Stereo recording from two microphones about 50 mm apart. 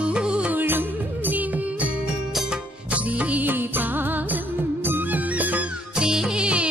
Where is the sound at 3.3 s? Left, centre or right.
Right.